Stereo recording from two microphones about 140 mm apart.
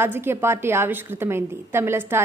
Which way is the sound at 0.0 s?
15° right (ahead or behind).